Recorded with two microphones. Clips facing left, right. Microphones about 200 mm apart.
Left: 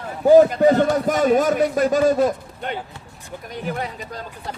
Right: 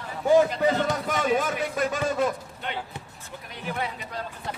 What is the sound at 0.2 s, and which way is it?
A man's voice, 40° left (ahead or behind).